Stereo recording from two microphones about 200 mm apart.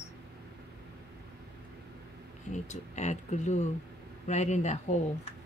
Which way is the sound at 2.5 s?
35° left (ahead or behind).